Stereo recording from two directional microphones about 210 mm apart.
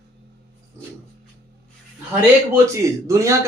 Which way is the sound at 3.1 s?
15° right (ahead or behind).